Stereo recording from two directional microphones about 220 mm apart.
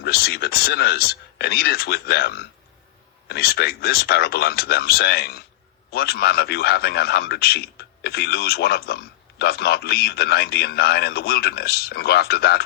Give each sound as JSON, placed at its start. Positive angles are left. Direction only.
{"t": 0.0, "sound": "a man's voice", "side_deg": 45}